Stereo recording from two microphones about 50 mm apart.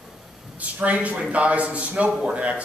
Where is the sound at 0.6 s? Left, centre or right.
Right.